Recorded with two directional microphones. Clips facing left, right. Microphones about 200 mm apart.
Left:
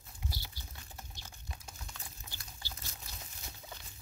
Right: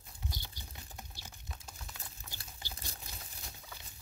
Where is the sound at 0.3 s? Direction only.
15° right (ahead or behind).